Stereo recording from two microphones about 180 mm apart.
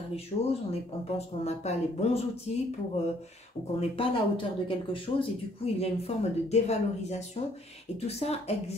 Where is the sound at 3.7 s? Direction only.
30° left (ahead or behind).